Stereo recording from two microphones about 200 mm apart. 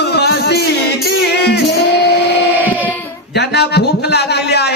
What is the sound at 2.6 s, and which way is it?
Child singing, 10° right (ahead or behind).